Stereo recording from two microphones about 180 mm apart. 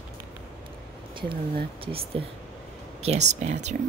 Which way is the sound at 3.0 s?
40° right (ahead or behind).